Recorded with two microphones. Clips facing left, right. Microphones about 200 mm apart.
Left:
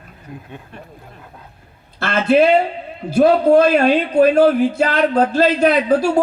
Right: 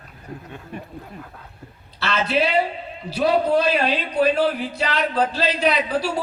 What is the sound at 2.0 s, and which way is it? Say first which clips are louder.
A man's voice: left 8 dB; 50° left (ahead or behind).